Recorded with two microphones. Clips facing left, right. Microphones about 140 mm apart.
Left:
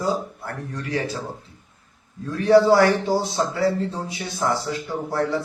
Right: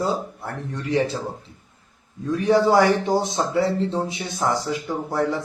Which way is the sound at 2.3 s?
15° right (ahead or behind).